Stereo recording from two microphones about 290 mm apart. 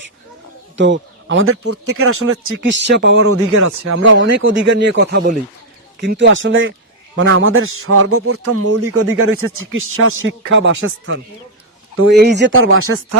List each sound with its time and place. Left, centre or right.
0.8 s a man's voice: right